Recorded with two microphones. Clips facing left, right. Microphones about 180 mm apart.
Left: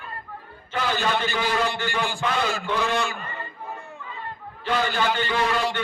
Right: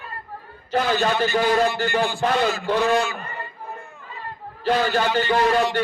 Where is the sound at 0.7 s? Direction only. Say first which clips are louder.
Right 4 dB; 40° right (ahead or behind).